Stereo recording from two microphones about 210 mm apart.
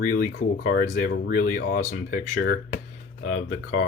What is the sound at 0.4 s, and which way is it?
Speech, 40° left (ahead or behind).